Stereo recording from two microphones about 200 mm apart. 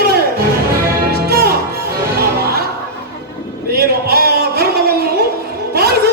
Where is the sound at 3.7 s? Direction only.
50° right (ahead or behind).